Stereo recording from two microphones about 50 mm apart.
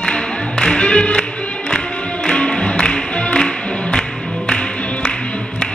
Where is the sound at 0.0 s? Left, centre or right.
Centre.